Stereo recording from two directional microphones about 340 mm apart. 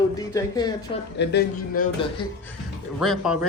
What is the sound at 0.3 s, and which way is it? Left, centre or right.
Speech, centre.